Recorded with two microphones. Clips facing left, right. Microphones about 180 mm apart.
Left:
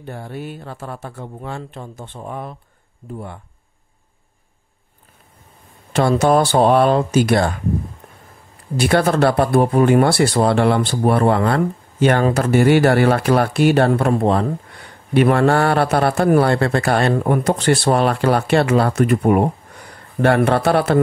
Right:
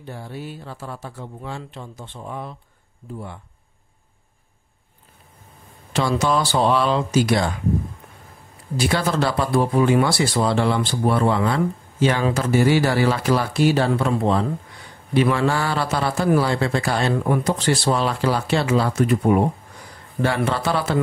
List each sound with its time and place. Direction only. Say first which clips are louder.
0.0 s speech: left 3 dB; 55° left (ahead or behind)
5.9 s speech: left 6 dB; 55° left (ahead or behind)
8.7 s speech: left 5 dB; 60° left (ahead or behind)